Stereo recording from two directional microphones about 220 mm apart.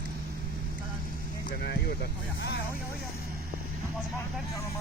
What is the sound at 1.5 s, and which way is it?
Speech, 45° left (ahead or behind).